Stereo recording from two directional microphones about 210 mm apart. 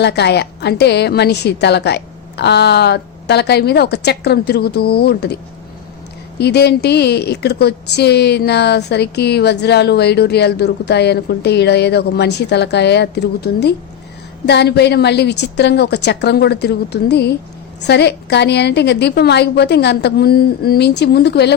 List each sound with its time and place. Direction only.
0.0 s a woman's voice: 55° left (ahead or behind)
6.4 s a woman's voice: 50° left (ahead or behind)